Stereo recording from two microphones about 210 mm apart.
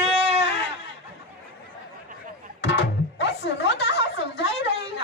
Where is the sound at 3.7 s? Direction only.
55° left (ahead or behind).